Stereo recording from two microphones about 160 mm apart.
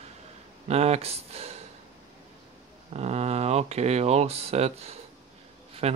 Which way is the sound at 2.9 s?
40° right (ahead or behind).